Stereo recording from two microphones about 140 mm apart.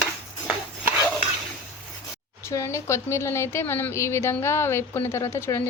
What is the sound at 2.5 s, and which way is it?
A woman's voice, 20° left (ahead or behind).